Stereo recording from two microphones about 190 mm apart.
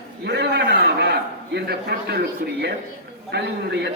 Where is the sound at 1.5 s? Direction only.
55° right (ahead or behind).